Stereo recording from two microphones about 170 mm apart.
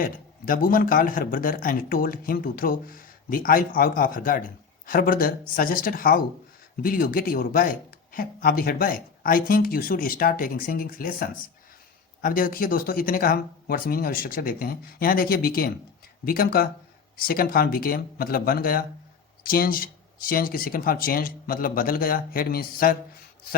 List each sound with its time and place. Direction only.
0.0 s speech: 55° left (ahead or behind)